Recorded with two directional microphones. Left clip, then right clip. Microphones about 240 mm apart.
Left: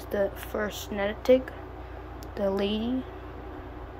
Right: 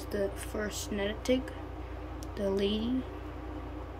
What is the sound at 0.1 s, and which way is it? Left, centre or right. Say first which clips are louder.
A woman's voice: left 6 dB; centre.